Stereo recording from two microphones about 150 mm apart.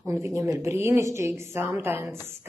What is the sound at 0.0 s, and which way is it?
Speech, 20° right (ahead or behind).